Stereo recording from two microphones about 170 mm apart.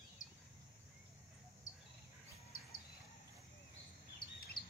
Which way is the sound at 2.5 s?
55° left (ahead or behind).